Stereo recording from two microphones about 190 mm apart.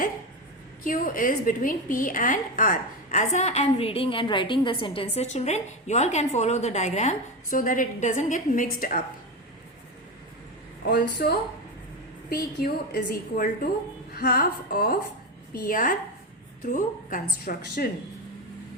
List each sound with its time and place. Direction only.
0.9 s a woman's voice: 45° left (ahead or behind)
11.2 s a woman's voice: 50° left (ahead or behind)